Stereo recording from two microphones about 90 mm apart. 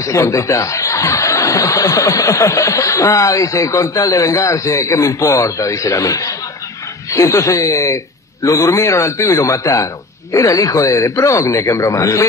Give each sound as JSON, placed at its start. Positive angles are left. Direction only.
{"t": 0.0, "sound": "speech", "side_deg": 35}